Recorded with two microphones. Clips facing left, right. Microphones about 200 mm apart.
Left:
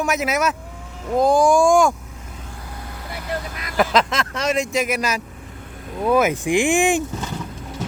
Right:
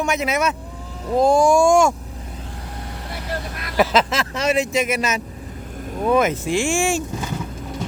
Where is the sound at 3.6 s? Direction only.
Centre (ahead or behind); by 7.0 s 15° left (ahead or behind).